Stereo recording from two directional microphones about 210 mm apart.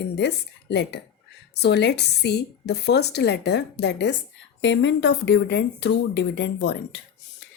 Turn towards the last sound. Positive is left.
turn(degrees=55)  # may be behind; listen again after turning